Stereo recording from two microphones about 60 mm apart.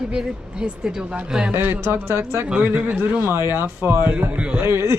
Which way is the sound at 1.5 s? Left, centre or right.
Right.